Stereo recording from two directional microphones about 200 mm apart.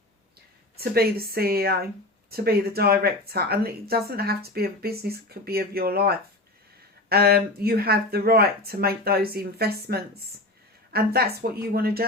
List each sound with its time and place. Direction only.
0.8 s speech: 50° right (ahead or behind)